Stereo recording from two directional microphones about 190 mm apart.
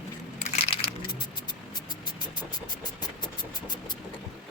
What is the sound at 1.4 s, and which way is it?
Music, 25° left (ahead or behind).